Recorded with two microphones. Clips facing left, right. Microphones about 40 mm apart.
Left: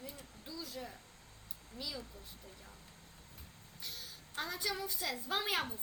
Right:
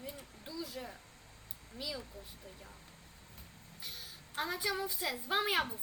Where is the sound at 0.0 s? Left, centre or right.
Centre.